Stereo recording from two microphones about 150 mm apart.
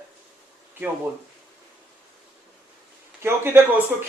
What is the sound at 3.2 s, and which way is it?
Speech, 15° right (ahead or behind).